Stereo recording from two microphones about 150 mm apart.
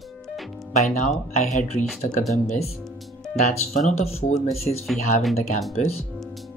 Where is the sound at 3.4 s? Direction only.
55° left (ahead or behind).